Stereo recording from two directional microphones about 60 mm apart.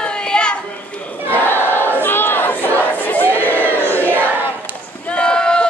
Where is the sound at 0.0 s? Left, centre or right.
Centre.